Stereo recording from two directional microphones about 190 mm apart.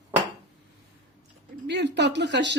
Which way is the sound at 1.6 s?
65° right (ahead or behind).